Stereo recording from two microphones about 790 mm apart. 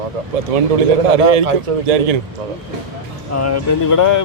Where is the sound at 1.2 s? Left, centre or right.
Right.